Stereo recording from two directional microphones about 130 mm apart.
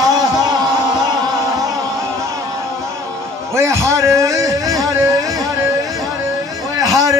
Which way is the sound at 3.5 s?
20° right (ahead or behind).